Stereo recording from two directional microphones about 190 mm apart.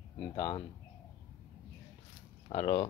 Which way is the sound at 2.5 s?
30° left (ahead or behind).